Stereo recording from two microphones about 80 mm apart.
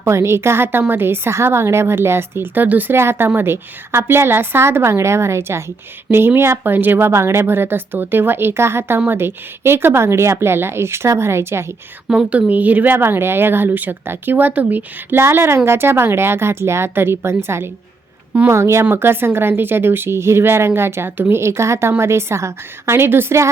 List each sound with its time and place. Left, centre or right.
0.0 s a woman's voice: right
12.0 s a woman's voice: centre; by 23.5 s right